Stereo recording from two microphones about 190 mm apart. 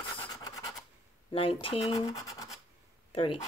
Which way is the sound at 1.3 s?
30° left (ahead or behind).